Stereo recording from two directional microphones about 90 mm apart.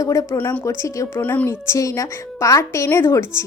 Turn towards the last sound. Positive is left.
turn(degrees=30)  # may be behind; listen again after turning